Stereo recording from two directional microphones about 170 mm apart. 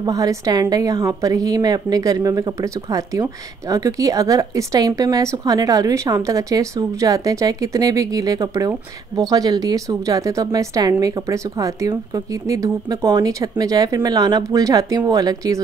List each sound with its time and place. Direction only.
0.0 s a woman's voice: 20° right (ahead or behind)